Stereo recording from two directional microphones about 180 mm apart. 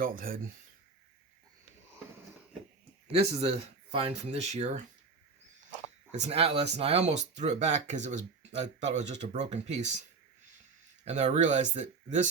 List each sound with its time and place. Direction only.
0.0 s speech: 50° right (ahead or behind)
3.1 s speech: 35° right (ahead or behind)
6.2 s speech: 35° right (ahead or behind)
11.0 s speech: 40° right (ahead or behind)